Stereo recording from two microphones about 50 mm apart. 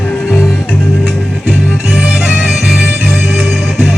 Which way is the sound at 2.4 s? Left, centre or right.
Centre.